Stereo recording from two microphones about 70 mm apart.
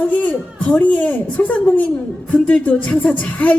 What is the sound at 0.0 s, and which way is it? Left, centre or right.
A woman's voice, left.